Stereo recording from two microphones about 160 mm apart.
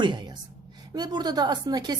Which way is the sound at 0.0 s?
30° right (ahead or behind).